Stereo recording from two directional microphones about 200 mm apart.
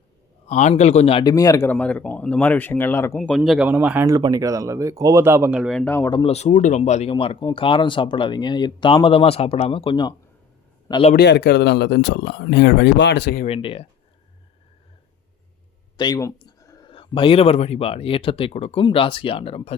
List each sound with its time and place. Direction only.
0.4 s speech: 35° left (ahead or behind); by 3.2 s 10° left (ahead or behind)
3.2 s speech: centre (ahead or behind)
5.8 s speech: 10° left (ahead or behind)
6.3 s a man's voice: 35° left (ahead or behind)
11.1 s speech: 55° left (ahead or behind)
13.4 s speech: 30° left (ahead or behind)
16.0 s speech: 20° left (ahead or behind)